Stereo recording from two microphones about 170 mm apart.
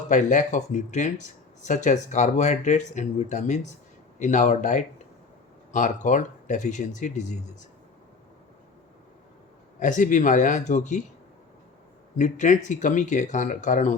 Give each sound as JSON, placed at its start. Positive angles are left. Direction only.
{"t": 0.1, "sound": "speech", "side_deg": 45}
{"t": 9.8, "sound": "speech", "side_deg": 50}
{"t": 12.1, "sound": "speech", "side_deg": 45}